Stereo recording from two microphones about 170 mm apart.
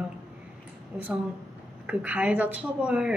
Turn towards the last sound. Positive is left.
turn(degrees=-5)  # may be behind; listen again after turning